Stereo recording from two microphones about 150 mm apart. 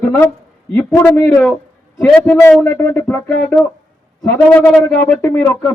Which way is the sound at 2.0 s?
5° left (ahead or behind).